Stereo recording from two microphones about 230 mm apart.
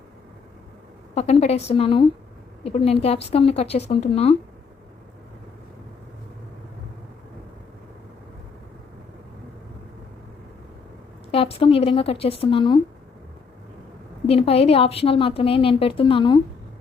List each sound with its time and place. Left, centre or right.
1.1 s a woman's voice: left
11.3 s a woman's voice: left
14.3 s a woman's voice: left